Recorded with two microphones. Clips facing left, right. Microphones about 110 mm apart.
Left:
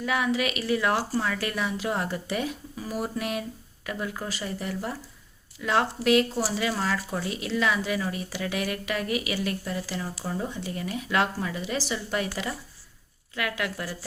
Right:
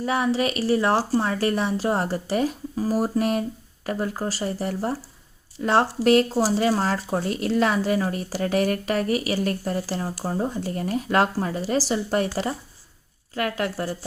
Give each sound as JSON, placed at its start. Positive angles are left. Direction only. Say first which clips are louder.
{"t": 0.0, "sound": "speech", "louder": "right 4 dB", "side_deg": -35}